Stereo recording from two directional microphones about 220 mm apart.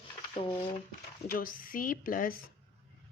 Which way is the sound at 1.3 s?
40° left (ahead or behind).